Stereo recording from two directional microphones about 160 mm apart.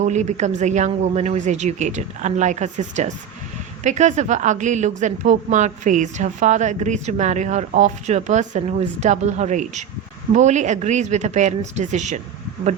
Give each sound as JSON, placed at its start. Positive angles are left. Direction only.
{"t": 0.0, "sound": "speech", "side_deg": -45}